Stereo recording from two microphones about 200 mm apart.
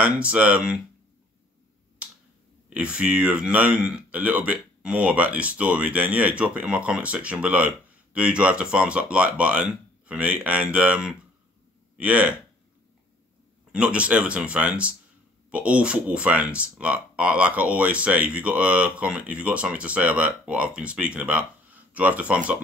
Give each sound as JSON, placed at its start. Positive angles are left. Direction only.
{"t": 0.0, "sound": "speech", "side_deg": -5}
{"t": 2.7, "sound": "speech", "side_deg": -5}
{"t": 13.7, "sound": "speech", "side_deg": -5}